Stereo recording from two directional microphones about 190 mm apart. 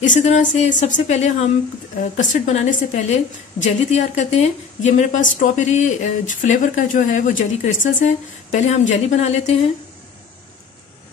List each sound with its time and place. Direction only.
0.0 s a woman's voice: 40° left (ahead or behind)